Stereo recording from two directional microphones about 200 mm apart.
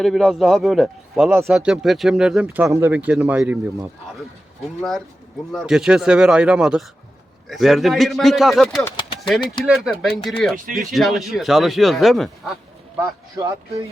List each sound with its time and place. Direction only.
0.0 s speech: centre (ahead or behind)
4.6 s speech: centre (ahead or behind)
13.0 s speech: 20° right (ahead or behind)